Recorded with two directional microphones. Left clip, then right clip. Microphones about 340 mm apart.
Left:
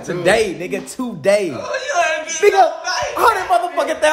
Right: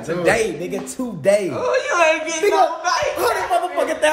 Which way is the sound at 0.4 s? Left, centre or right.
Centre.